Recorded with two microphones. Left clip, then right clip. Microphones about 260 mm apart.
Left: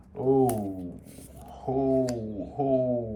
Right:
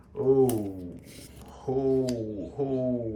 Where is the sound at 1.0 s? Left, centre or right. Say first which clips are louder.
Left 1 dB; centre.